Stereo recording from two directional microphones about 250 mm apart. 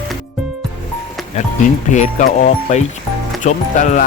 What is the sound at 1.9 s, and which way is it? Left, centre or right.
Speech, left.